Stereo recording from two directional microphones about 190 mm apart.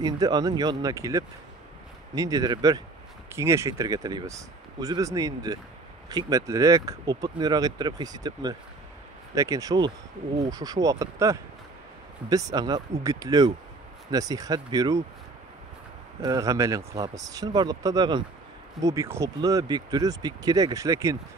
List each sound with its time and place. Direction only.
0.0 s speech: 20° right (ahead or behind)
16.2 s speech: 20° right (ahead or behind)